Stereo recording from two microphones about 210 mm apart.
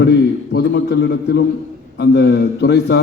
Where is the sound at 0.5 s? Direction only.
55° left (ahead or behind).